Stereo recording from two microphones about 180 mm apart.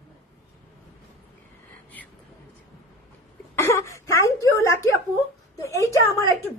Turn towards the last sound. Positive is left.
turn(degrees=15)  # may be behind; listen again after turning